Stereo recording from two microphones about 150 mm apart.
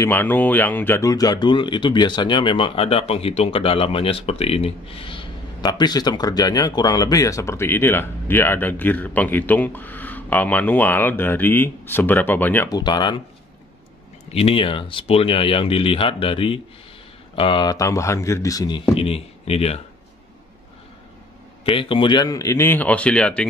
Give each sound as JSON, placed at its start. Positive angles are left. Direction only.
{"t": 0.0, "sound": "speech", "side_deg": 10}
{"t": 12.6, "sound": "speech", "side_deg": 25}
{"t": 14.3, "sound": "speech", "side_deg": 40}
{"t": 21.6, "sound": "speech", "side_deg": 35}